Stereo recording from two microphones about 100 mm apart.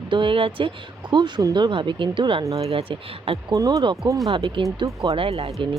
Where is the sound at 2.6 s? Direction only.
70° right (ahead or behind).